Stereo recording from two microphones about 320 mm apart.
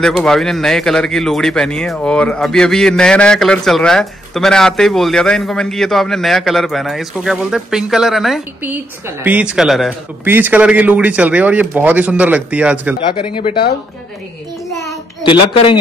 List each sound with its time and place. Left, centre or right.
0.0 s speech: centre
13.1 s speech: centre
14.9 s a sound: centre